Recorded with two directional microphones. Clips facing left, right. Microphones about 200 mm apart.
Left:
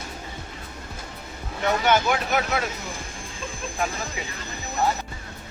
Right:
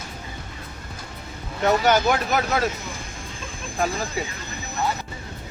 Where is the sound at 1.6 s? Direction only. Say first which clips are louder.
Right 3 dB; 40° right (ahead or behind).